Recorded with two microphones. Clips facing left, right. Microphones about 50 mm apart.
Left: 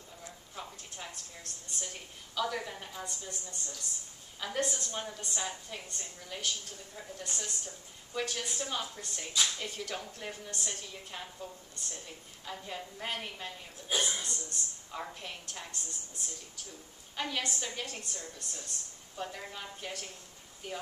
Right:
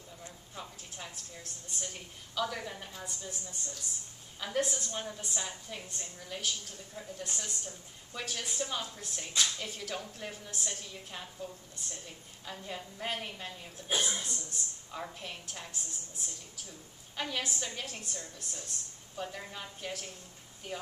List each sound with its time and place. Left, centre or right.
0.6 s a woman's voice: centre
4.4 s a woman's voice: centre